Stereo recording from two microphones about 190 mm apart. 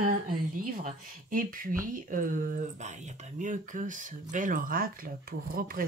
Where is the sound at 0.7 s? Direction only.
45° right (ahead or behind).